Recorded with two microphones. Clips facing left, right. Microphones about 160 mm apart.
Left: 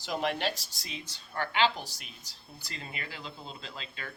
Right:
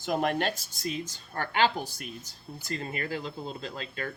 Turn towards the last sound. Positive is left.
turn(degrees=-45)  # may be behind; listen again after turning